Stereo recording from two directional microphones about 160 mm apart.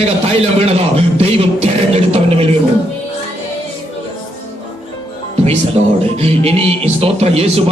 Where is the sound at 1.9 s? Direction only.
40° right (ahead or behind).